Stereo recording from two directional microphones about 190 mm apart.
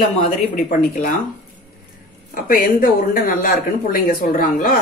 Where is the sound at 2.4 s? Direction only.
45° left (ahead or behind).